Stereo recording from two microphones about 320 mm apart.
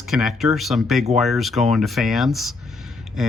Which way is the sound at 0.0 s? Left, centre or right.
Centre.